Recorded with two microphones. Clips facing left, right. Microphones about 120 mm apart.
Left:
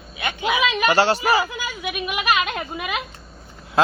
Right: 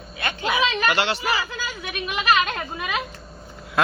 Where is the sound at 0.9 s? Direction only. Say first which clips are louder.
Left 6 dB; 40° left (ahead or behind).